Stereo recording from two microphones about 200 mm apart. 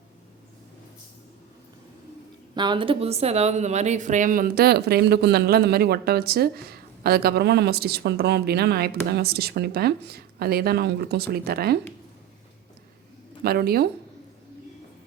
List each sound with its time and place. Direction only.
2.6 s speech: 25° right (ahead or behind); by 11.8 s 50° right (ahead or behind)
13.4 s speech: 50° right (ahead or behind)